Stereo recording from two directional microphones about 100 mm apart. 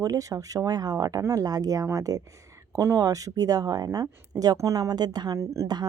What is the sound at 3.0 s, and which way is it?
Speech, 35° right (ahead or behind).